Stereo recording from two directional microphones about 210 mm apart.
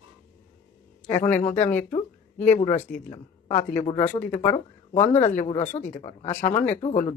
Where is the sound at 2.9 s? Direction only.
35° left (ahead or behind).